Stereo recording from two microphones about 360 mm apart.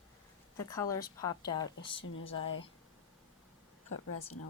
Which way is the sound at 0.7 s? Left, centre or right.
Centre.